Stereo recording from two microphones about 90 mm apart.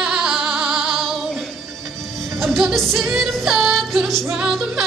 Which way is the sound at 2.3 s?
Centre (ahead or behind).